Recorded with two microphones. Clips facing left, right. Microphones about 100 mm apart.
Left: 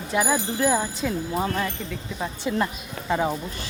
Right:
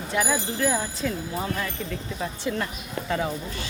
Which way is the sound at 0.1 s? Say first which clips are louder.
Left 3 dB; 15° left (ahead or behind).